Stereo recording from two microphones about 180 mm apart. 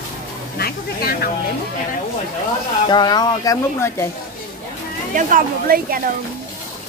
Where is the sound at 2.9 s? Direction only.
25° left (ahead or behind).